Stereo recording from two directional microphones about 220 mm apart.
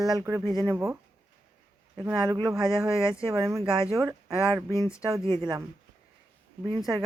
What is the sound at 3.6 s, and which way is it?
Speech, 25° right (ahead or behind).